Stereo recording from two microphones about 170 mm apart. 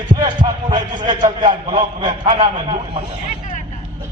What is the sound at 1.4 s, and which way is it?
A man's voice, 25° right (ahead or behind).